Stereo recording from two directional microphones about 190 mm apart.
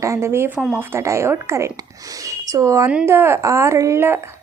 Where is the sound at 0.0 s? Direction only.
15° right (ahead or behind).